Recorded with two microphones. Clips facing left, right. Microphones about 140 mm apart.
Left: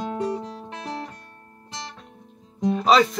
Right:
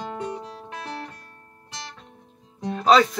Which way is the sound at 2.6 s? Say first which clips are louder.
Even; 5° left (ahead or behind).